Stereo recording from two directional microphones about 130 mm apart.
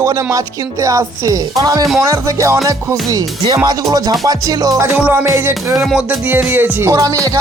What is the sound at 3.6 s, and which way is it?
Music, 30° right (ahead or behind).